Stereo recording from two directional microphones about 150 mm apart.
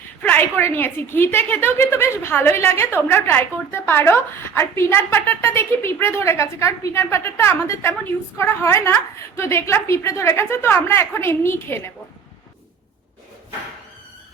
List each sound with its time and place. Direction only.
0.2 s a woman's voice: 10° left (ahead or behind)